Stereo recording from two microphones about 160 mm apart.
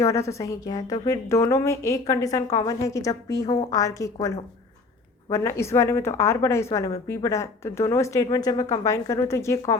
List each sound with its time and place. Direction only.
0.0 s a woman's voice: 20° left (ahead or behind)